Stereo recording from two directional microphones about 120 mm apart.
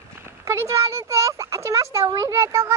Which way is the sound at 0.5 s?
25° right (ahead or behind).